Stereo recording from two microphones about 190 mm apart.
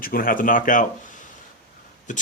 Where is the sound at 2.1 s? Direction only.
40° left (ahead or behind).